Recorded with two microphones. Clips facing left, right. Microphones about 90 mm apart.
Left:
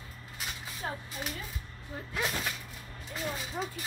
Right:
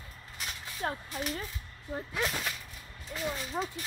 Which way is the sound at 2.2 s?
Centre (ahead or behind).